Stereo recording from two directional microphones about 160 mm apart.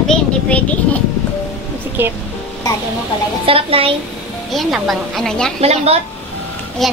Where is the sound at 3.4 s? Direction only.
35° right (ahead or behind).